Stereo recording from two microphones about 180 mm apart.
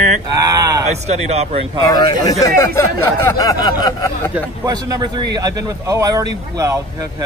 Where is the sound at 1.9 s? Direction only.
20° left (ahead or behind).